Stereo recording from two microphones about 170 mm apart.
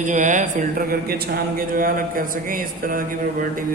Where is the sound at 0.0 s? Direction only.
50° right (ahead or behind).